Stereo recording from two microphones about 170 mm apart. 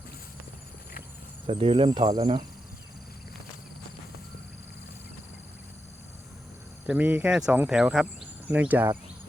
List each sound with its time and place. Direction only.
1.5 s speech: 35° right (ahead or behind)
6.8 s speech: 10° right (ahead or behind)